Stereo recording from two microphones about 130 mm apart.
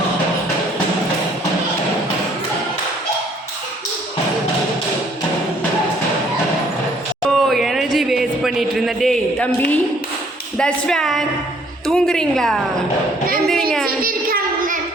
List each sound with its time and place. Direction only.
7.3 s a sound: centre (ahead or behind)
10.6 s a woman's voice: 5° left (ahead or behind)
14.1 s child singing: 90° right